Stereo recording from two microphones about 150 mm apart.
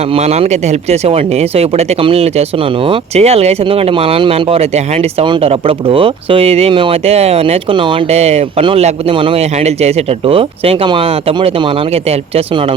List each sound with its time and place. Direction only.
0.9 s speech: 45° right (ahead or behind)
2.9 s speech: 40° right (ahead or behind)